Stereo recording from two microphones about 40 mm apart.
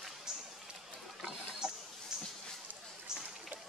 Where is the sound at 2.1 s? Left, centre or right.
Centre.